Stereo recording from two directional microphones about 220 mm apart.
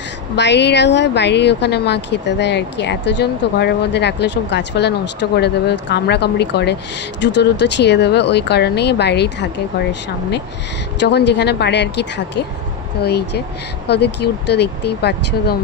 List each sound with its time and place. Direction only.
0.4 s a woman's voice: 50° left (ahead or behind)
11.0 s a woman's voice: 50° left (ahead or behind)